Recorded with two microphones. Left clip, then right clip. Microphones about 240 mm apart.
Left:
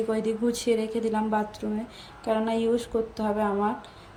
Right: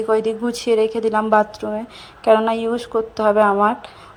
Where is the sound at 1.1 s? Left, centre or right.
Right.